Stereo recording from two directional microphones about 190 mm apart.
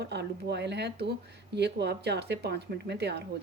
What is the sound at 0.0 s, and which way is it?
A woman's voice, 65° right (ahead or behind).